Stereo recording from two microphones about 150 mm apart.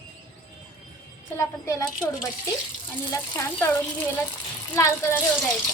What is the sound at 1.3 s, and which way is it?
A woman's voice, 20° left (ahead or behind).